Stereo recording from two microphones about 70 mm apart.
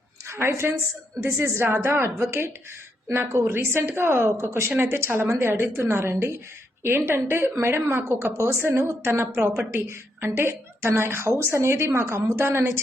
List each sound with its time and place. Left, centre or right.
0.3 s a woman's voice: right